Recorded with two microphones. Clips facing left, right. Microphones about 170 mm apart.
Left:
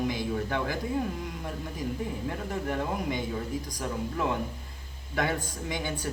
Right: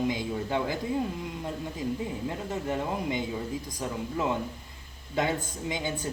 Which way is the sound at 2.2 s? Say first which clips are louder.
Right 1 dB; 20° right (ahead or behind).